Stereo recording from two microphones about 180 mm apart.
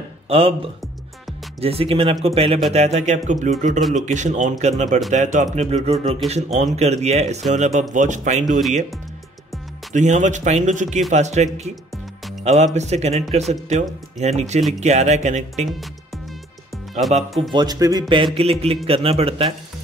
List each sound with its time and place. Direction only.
0.3 s speech: 30° right (ahead or behind)
1.6 s speech: 35° right (ahead or behind)
9.9 s speech: 40° right (ahead or behind)
17.0 s speech: centre (ahead or behind)
17.4 s speech: 25° right (ahead or behind)